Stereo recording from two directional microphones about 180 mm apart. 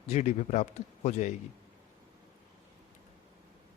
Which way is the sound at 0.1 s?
35° left (ahead or behind).